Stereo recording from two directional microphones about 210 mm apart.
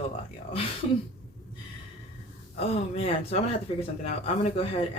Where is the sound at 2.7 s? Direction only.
30° left (ahead or behind).